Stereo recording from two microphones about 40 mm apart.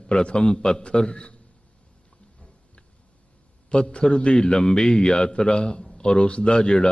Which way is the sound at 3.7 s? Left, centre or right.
Left.